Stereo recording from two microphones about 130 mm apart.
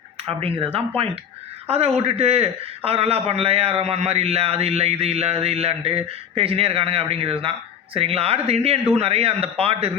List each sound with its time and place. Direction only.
0.3 s a man's voice: 45° right (ahead or behind)